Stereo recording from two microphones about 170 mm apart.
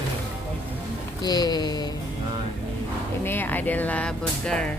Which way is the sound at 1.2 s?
25° left (ahead or behind).